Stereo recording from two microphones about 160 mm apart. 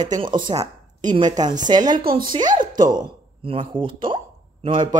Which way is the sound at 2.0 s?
65° right (ahead or behind).